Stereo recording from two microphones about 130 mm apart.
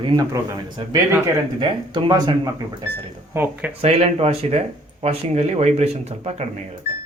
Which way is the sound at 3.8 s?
50° right (ahead or behind).